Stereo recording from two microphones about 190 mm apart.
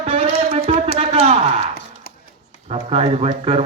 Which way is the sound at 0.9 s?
35° right (ahead or behind).